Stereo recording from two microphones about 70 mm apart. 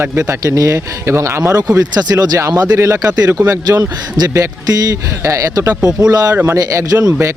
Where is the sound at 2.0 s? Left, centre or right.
Right.